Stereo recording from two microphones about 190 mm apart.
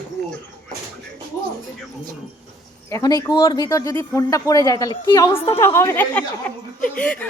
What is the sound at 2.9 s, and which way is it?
A woman's voice, 20° left (ahead or behind).